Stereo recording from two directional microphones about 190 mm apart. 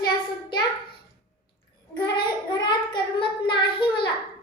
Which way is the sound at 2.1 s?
25° left (ahead or behind).